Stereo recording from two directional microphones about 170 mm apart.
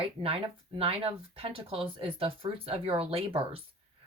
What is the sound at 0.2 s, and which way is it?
Speech, 35° right (ahead or behind).